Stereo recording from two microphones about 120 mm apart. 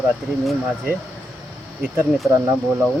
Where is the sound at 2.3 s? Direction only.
25° right (ahead or behind).